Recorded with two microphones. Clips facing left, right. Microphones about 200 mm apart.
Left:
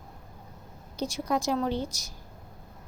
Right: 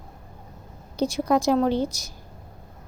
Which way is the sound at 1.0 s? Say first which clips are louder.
Right 7 dB; 70° right (ahead or behind).